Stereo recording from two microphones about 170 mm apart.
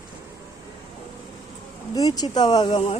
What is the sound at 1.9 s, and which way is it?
Speech, 20° left (ahead or behind).